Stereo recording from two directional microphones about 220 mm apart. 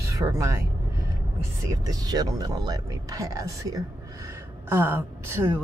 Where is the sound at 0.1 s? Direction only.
15° right (ahead or behind).